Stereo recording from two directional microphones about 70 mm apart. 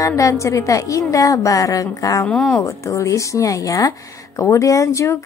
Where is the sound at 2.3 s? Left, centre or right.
Centre.